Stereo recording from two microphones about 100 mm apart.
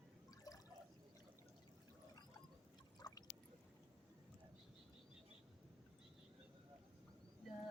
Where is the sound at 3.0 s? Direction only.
40° left (ahead or behind).